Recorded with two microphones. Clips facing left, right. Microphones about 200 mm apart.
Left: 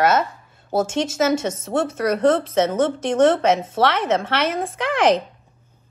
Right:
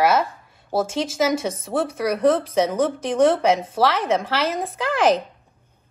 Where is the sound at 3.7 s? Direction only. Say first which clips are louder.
Left 1 dB; centre (ahead or behind).